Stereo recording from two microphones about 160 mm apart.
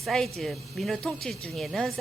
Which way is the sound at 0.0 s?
5° left (ahead or behind).